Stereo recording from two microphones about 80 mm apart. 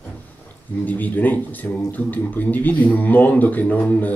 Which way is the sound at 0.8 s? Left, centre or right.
Left.